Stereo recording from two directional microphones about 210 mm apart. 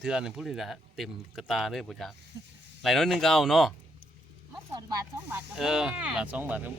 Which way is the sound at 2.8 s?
Centre (ahead or behind).